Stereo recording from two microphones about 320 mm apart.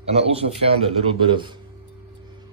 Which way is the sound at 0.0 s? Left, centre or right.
Centre.